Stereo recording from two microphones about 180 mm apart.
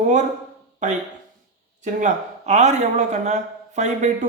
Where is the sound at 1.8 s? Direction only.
45° right (ahead or behind).